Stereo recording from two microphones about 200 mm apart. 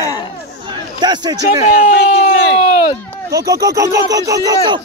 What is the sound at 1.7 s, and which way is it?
Speech, 40° left (ahead or behind).